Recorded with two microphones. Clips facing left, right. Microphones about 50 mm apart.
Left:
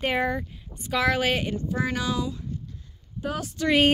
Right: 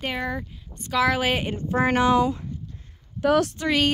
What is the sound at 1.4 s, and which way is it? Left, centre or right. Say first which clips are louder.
Speech: right 4 dB; right.